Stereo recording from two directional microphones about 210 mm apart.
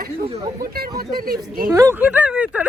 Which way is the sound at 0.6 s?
45° right (ahead or behind).